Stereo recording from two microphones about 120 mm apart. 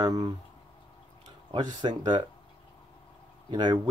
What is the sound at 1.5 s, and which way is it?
Speech, 40° right (ahead or behind).